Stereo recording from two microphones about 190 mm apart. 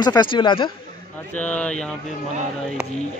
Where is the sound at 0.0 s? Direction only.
25° left (ahead or behind).